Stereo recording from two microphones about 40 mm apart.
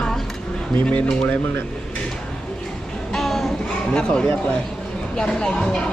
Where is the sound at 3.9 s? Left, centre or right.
Left.